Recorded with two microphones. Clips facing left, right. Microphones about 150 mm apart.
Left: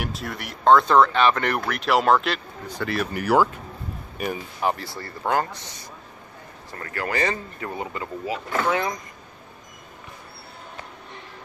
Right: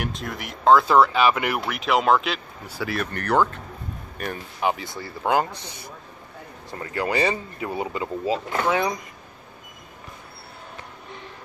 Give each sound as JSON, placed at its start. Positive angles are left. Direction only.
{"t": 0.0, "sound": "speech", "side_deg": 0}
{"t": 5.2, "sound": "speech", "side_deg": -15}
{"t": 6.7, "sound": "speech", "side_deg": -15}